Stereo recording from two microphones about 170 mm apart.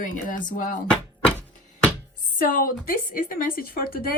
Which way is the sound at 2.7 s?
55° left (ahead or behind).